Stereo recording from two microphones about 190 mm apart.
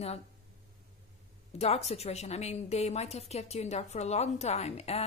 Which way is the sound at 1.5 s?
35° left (ahead or behind).